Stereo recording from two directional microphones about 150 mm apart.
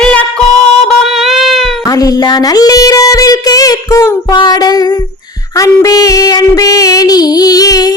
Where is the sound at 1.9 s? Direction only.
25° left (ahead or behind).